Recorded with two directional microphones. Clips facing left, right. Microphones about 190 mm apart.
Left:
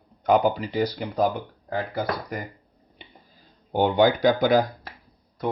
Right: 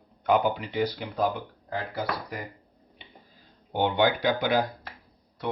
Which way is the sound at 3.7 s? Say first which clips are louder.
Left 4 dB; 40° left (ahead or behind).